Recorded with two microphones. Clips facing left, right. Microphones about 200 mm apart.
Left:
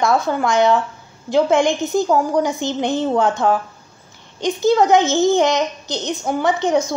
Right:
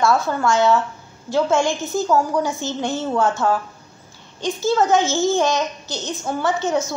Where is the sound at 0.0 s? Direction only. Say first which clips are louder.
Left 1 dB; 15° left (ahead or behind).